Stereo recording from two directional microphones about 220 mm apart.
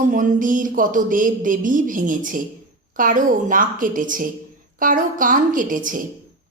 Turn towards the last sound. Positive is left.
turn(degrees=-35)  # may be behind; listen again after turning